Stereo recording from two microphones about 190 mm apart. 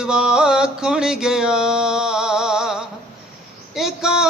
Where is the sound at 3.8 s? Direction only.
Centre (ahead or behind).